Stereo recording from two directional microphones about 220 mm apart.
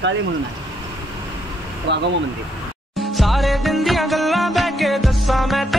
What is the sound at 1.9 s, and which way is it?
Speech, 50° right (ahead or behind).